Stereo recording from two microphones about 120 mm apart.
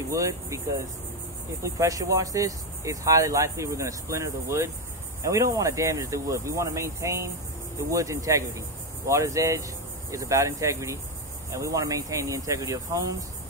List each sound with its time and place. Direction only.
0.1 s speech: 25° right (ahead or behind)
1.6 s speech: 25° right (ahead or behind)